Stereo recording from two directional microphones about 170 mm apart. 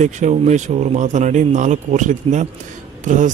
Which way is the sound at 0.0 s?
45° right (ahead or behind).